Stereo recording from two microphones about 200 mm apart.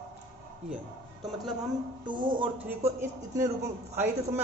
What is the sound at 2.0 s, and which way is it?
A man's voice, 25° right (ahead or behind).